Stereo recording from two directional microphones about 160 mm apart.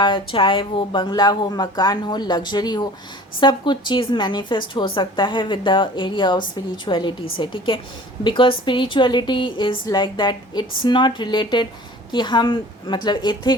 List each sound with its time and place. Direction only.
0.0 s a woman's voice: 30° left (ahead or behind)